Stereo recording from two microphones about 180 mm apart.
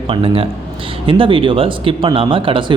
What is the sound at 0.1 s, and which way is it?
Speech, 30° right (ahead or behind).